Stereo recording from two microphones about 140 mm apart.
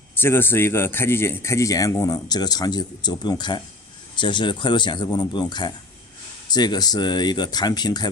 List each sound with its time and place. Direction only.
0.1 s a man's voice: 15° left (ahead or behind)